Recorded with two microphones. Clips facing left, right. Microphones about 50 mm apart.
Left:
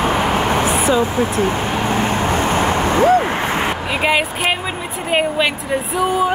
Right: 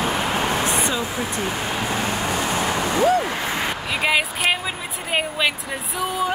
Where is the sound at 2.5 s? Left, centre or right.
Left.